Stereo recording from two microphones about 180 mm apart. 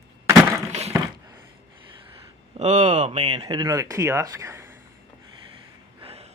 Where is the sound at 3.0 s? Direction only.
25° right (ahead or behind).